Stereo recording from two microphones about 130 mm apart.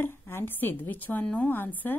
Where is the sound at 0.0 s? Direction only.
20° left (ahead or behind).